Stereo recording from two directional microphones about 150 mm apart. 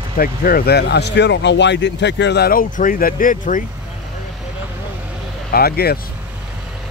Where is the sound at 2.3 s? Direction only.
85° left; by 3.6 s 60° left (ahead or behind).